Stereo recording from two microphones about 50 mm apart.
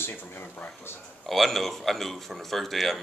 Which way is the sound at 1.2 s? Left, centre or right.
Centre.